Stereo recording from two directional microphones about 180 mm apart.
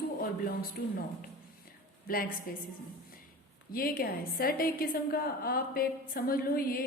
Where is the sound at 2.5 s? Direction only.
50° left (ahead or behind).